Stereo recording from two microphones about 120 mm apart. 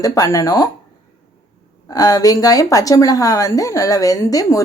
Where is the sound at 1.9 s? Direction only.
30° left (ahead or behind).